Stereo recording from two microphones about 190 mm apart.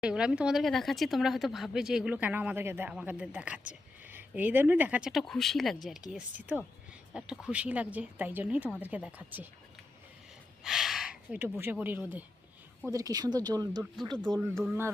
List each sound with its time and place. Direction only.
0.0 s speech: 5° right (ahead or behind)
10.6 s speech: centre (ahead or behind)